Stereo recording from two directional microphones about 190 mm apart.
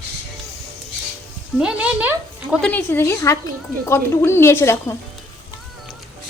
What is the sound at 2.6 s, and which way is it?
Speech, 10° left (ahead or behind).